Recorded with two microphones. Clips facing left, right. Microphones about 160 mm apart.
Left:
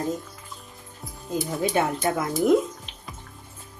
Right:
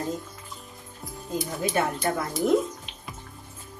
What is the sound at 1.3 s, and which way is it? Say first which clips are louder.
Speech: left 3 dB; 20° left (ahead or behind).